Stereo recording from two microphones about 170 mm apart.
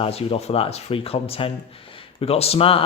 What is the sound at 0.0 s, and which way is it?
Speech, 35° left (ahead or behind).